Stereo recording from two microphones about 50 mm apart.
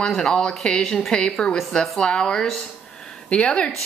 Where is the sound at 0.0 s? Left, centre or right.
Centre.